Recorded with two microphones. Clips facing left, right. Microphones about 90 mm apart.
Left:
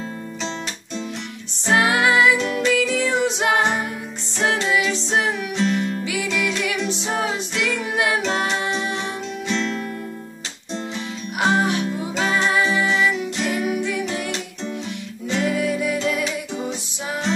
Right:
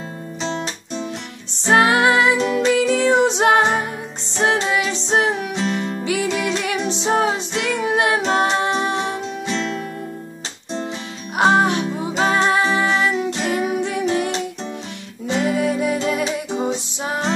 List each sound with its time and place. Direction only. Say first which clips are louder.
1.6 s music: right 3 dB; 30° right (ahead or behind)
11.3 s music: right 4 dB; 30° right (ahead or behind)
12.2 s music: right 3 dB; 35° right (ahead or behind)
13.1 s music: right 3 dB; 35° right (ahead or behind)
15.5 s music: right 2 dB; 35° right (ahead or behind)